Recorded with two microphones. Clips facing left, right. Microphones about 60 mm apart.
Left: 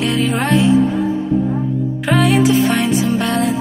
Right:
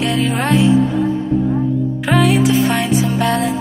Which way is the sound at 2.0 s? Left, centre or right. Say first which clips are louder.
Left 1 dB; centre.